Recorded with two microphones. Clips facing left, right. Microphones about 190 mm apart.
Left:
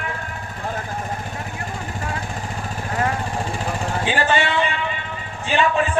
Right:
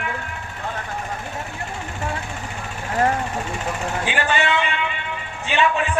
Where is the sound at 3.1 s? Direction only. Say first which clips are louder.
Even; 35° left (ahead or behind).